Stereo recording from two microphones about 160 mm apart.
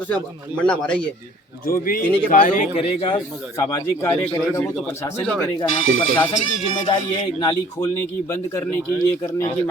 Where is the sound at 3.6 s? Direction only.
20° left (ahead or behind).